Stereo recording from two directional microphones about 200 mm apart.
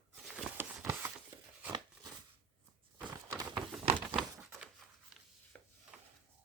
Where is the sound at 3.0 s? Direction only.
20° right (ahead or behind).